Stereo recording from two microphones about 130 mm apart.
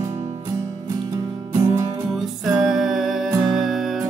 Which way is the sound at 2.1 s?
Centre (ahead or behind).